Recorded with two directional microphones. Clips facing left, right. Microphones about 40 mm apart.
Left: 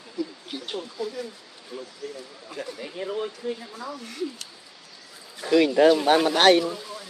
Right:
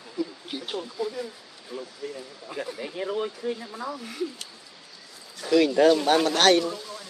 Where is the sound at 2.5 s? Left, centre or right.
Centre.